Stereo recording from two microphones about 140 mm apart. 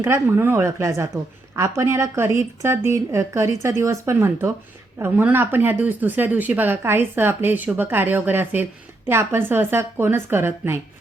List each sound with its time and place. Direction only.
0.0 s a woman's voice: 20° right (ahead or behind)